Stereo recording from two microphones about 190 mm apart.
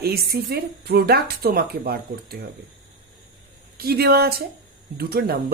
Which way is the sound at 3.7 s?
55° right (ahead or behind).